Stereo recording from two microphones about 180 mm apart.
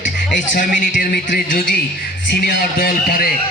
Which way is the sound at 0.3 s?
50° left (ahead or behind).